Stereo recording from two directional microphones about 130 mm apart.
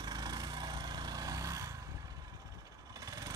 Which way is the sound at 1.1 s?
25° right (ahead or behind).